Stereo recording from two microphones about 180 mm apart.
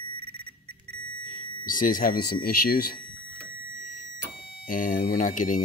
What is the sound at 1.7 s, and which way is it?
Speech, 50° left (ahead or behind).